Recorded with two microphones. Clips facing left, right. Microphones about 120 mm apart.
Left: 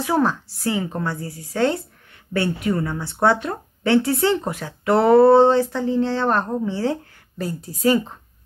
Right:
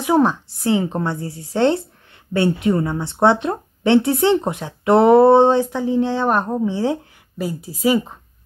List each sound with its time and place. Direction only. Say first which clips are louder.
0.0 s speech: right 4 dB; 20° right (ahead or behind)